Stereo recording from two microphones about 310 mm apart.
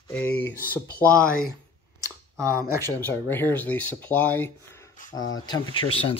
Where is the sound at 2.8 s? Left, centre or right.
Centre.